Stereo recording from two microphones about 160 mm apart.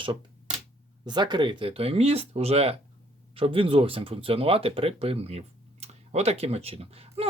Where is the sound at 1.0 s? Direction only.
25° right (ahead or behind).